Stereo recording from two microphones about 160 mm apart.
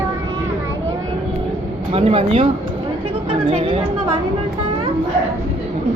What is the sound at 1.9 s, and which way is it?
Speech, 35° right (ahead or behind).